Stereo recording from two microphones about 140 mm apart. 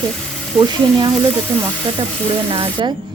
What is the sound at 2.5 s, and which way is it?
Sizzle, 40° right (ahead or behind).